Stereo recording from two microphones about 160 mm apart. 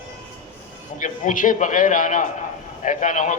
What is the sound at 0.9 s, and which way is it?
A man's voice, 55° left (ahead or behind).